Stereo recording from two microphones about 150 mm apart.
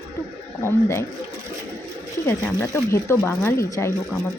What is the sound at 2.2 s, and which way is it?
Speech, 20° left (ahead or behind).